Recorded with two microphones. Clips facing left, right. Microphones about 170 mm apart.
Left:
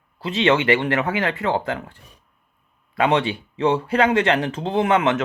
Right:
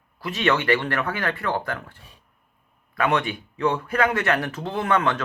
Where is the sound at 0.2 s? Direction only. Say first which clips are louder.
Left 4 dB; 25° left (ahead or behind).